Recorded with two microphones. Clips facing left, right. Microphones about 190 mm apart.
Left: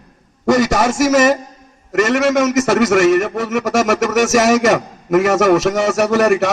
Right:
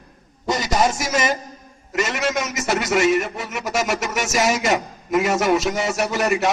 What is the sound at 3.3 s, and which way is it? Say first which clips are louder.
A man's voice: left 8 dB; 80° left.